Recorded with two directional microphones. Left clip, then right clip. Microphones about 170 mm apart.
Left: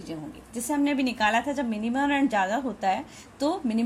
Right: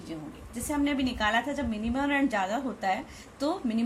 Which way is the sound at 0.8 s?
35° left (ahead or behind).